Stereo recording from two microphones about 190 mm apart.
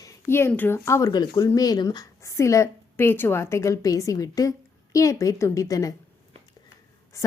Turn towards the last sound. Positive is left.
turn(degrees=15)  # may be behind; listen again after turning